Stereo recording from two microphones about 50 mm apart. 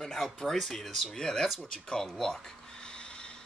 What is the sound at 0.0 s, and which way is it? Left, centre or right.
Speech, centre.